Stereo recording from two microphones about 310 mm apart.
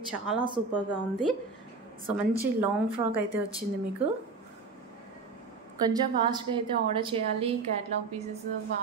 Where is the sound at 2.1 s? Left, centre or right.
Centre.